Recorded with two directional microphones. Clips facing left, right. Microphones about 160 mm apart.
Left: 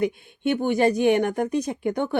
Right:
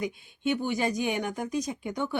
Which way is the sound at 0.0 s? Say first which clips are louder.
Left 6 dB; 55° left (ahead or behind).